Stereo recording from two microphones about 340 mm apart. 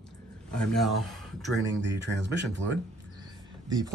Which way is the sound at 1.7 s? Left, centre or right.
Right.